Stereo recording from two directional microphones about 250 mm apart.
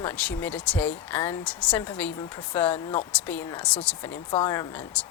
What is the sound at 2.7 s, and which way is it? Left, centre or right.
Speech, left.